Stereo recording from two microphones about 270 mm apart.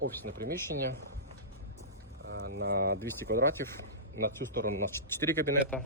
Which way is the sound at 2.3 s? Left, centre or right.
Right.